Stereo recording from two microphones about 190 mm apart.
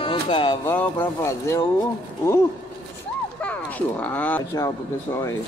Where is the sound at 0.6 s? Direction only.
10° left (ahead or behind).